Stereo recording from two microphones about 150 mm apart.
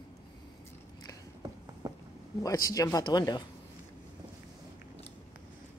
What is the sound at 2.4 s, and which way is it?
Speech, 25° left (ahead or behind).